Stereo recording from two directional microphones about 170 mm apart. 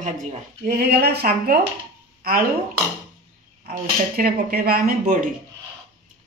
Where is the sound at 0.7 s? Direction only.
70° right (ahead or behind).